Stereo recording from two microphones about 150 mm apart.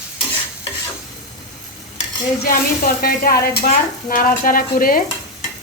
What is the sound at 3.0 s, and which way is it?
A woman's voice, 85° left.